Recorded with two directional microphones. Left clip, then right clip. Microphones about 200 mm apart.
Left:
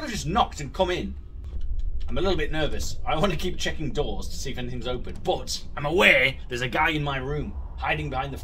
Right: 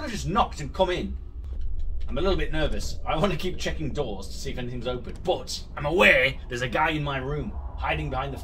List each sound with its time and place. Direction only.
0.0 s speech: 25° left (ahead or behind)
2.1 s speech: 25° left (ahead or behind)